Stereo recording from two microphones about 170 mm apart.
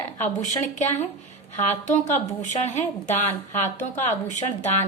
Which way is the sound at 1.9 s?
45° left (ahead or behind).